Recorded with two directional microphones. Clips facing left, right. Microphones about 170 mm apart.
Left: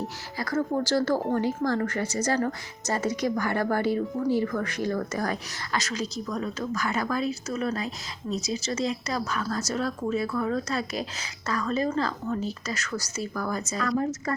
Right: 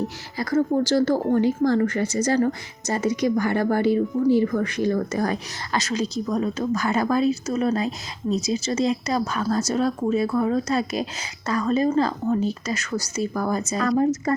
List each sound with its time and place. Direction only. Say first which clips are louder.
0.3 s speech: right 6 dB; 20° right (ahead or behind)